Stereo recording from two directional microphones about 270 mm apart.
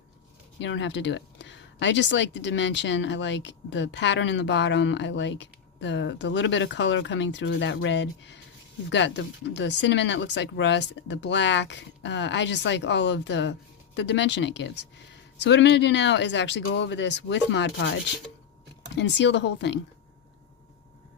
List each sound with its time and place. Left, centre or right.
0.6 s speech: left